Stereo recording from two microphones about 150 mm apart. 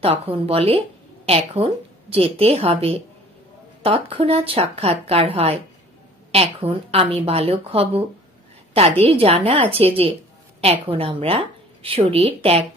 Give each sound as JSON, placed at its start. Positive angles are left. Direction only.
{"t": 0.0, "sound": "speech", "side_deg": -40}
{"t": 9.0, "sound": "a woman's voice", "side_deg": -40}